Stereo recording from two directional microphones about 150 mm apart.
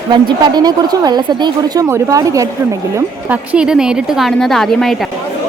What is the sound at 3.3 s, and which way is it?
A woman's voice, 5° right (ahead or behind).